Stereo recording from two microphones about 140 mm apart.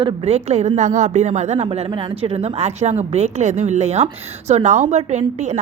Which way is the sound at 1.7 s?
35° right (ahead or behind).